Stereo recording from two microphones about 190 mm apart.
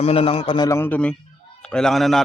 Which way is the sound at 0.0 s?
30° left (ahead or behind).